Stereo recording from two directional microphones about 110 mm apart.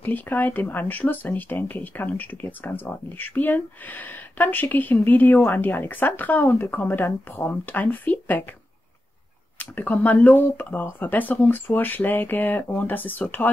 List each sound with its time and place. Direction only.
0.0 s speech: 15° left (ahead or behind)
9.6 s speech: 15° left (ahead or behind)